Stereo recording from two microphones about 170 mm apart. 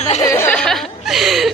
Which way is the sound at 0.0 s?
40° left (ahead or behind).